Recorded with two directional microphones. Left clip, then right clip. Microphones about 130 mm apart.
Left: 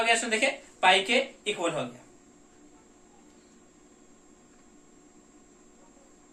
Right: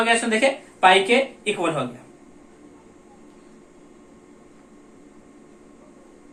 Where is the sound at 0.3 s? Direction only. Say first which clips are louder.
Right 7 dB; 25° left (ahead or behind).